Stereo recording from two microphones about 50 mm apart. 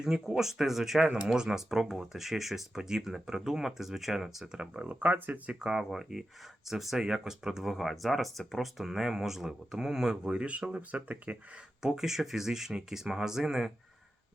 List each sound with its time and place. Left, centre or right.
0.0 s speech: centre
1.0 s speech: centre
4.9 s speech: right
5.5 s speech: centre; by 11.6 s right
11.8 s speech: centre